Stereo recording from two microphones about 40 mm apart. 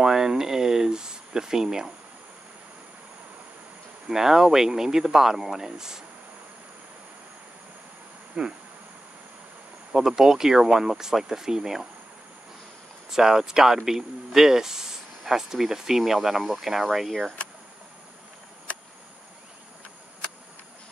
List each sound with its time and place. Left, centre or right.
0.0 s speech: centre
4.1 s speech: centre
8.4 s speech: centre
9.9 s speech: centre
13.1 s speech: centre